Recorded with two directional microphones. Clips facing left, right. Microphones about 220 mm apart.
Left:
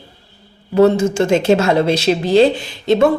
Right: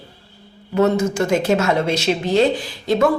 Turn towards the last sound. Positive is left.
turn(degrees=25)  # may be behind; listen again after turning